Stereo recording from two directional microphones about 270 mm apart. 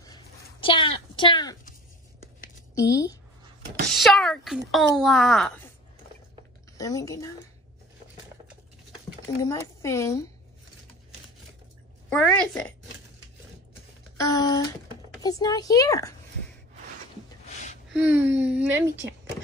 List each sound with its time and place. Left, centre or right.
0.0 s a sound: centre
2.7 s speech: centre
3.9 s speech: centre
6.8 s speech: centre
9.4 s speech: centre
12.1 s speech: centre
14.1 s a child's voice: centre
17.9 s speech: centre